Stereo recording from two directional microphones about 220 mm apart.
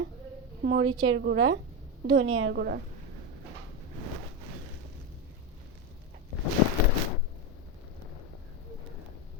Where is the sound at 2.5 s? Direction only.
45° right (ahead or behind).